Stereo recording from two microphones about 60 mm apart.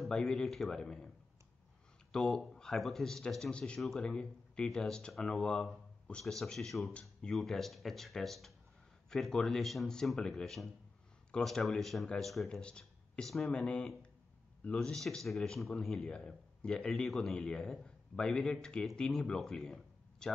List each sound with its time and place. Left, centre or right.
0.0 s speech: centre
2.1 s speech: centre
3.5 s speech: centre
6.2 s speech: centre
14.8 s speech: centre